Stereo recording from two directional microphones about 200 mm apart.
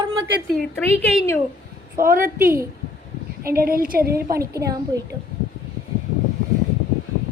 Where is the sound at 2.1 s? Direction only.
45° right (ahead or behind).